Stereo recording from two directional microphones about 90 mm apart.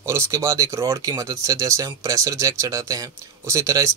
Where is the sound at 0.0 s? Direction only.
35° right (ahead or behind).